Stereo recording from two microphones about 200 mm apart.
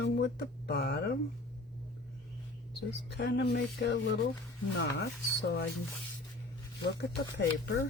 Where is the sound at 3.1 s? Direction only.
55° left (ahead or behind).